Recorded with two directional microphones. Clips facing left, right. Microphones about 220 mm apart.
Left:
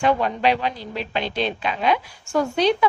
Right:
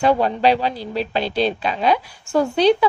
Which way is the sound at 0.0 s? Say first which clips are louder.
Right 3 dB; 35° right (ahead or behind).